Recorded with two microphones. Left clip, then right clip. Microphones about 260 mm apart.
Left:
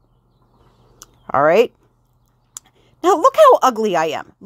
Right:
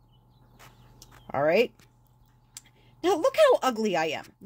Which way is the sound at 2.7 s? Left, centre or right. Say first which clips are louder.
Left 11 dB; centre.